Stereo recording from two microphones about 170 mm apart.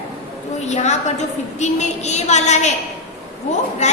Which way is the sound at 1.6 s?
40° left (ahead or behind).